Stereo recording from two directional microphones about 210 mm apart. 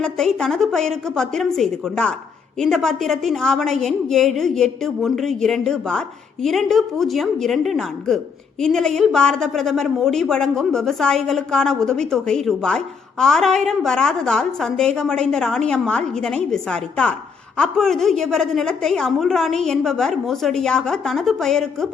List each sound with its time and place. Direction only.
0.0 s a woman's voice: 5° left (ahead or behind)